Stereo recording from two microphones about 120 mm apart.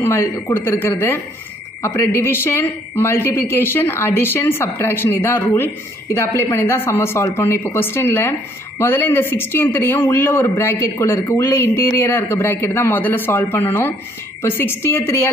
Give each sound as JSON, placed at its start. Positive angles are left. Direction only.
{"t": 0.0, "sound": "speech", "side_deg": 20}